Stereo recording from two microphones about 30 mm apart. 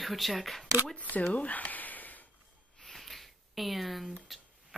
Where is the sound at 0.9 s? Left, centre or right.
Left.